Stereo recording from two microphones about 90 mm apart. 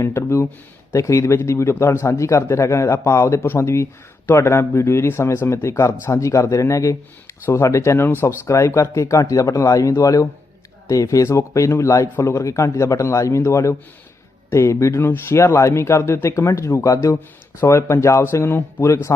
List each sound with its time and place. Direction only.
0.0 s speech: 30° left (ahead or behind)